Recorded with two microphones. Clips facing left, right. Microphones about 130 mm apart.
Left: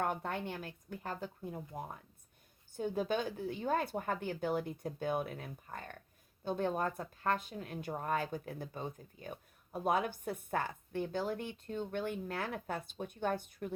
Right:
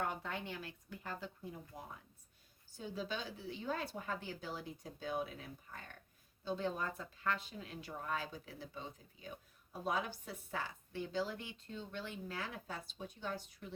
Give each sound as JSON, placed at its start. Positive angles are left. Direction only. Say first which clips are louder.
{"t": 0.0, "sound": "speech", "louder": "left 5 dB", "side_deg": 50}